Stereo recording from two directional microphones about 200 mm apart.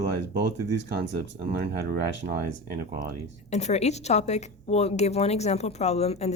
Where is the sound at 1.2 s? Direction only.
55° right (ahead or behind).